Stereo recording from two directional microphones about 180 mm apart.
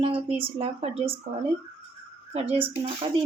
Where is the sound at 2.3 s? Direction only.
35° right (ahead or behind).